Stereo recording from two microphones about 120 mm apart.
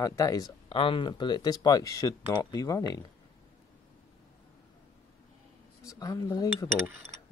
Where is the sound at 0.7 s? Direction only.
50° left (ahead or behind); by 3.1 s 30° left (ahead or behind).